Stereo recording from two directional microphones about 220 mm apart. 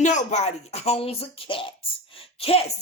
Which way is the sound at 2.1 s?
25° left (ahead or behind).